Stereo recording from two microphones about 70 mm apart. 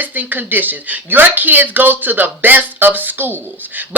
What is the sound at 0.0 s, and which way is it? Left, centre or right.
Speech, right.